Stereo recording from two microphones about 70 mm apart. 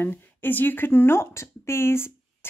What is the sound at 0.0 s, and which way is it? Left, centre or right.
Speech, left.